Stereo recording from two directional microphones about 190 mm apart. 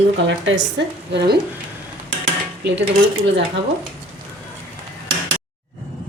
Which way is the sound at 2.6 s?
65° right (ahead or behind).